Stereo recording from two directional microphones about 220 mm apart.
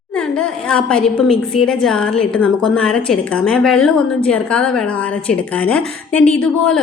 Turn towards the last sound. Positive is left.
turn(degrees=5)  # may be behind; listen again after turning